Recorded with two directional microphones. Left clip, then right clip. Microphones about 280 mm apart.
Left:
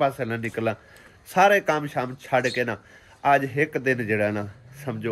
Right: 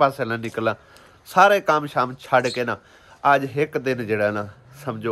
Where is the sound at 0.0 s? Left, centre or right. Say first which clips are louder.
Right 4 dB; centre.